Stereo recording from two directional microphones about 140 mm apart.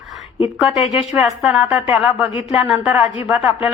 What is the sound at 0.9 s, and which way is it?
Speech, 5° right (ahead or behind).